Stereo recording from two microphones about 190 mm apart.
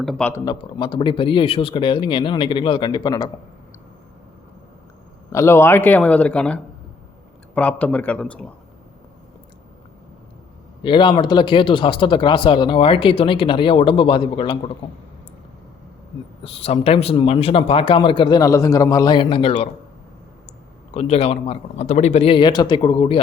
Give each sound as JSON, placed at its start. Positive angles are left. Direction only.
{"t": 0.0, "sound": "a man's voice", "side_deg": 5}
{"t": 0.4, "sound": "speech", "side_deg": 25}
{"t": 5.3, "sound": "a man's voice", "side_deg": 15}
{"t": 10.8, "sound": "speech", "side_deg": 25}
{"t": 16.4, "sound": "speech", "side_deg": 30}
{"t": 20.9, "sound": "speech", "side_deg": 35}